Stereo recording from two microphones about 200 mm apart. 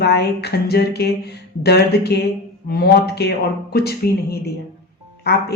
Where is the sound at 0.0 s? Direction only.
55° left (ahead or behind).